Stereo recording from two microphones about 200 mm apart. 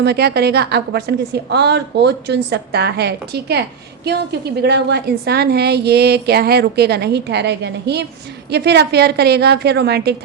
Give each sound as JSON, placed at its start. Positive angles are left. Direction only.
{"t": 0.0, "sound": "a woman's voice", "side_deg": -55}